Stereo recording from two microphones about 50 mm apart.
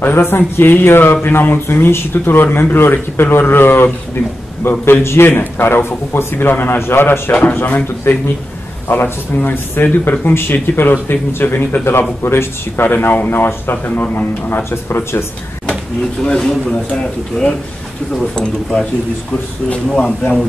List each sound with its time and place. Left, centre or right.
0.0 s speech: left
5.3 s speech: left
11.8 s speech: left
14.6 s speech: left
16.2 s speech: centre
19.3 s speech: left